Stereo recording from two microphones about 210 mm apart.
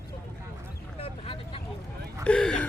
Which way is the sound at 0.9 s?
25° left (ahead or behind).